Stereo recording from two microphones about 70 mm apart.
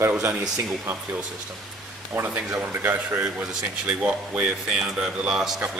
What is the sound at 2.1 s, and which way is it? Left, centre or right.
Speech, right.